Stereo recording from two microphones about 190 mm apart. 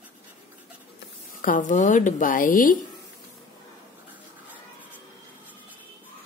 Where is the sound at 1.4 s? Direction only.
45° left (ahead or behind).